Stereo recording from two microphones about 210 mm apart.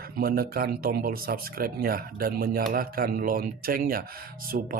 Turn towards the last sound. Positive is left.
turn(degrees=-50)  # may be behind; listen again after turning